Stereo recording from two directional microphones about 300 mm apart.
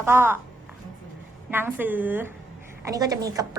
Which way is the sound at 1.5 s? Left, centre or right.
Centre.